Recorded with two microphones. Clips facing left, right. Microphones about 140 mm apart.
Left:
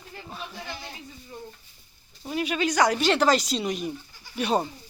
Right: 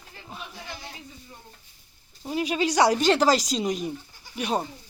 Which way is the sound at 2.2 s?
25° right (ahead or behind).